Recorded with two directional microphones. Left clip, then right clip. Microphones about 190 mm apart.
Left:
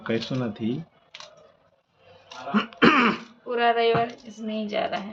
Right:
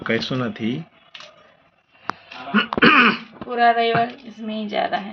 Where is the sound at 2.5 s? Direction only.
10° left (ahead or behind).